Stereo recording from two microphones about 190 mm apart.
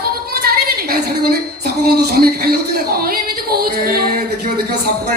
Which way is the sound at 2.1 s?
55° right (ahead or behind).